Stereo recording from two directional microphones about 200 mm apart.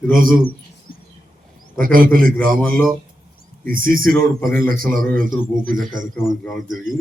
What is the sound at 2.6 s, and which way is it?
Speech, 5° left (ahead or behind).